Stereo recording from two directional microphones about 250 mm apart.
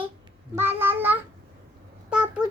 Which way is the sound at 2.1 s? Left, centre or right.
Centre.